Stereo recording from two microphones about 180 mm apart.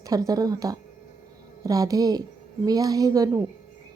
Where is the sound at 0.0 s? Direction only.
20° right (ahead or behind).